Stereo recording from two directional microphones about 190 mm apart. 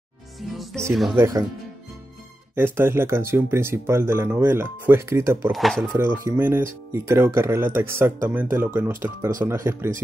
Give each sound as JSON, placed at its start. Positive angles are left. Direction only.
{"t": 0.4, "sound": "music", "side_deg": 0}
{"t": 1.1, "sound": "speech", "side_deg": -15}
{"t": 2.5, "sound": "speech", "side_deg": -10}
{"t": 5.5, "sound": "speech", "side_deg": 0}
{"t": 5.9, "sound": "speech", "side_deg": -10}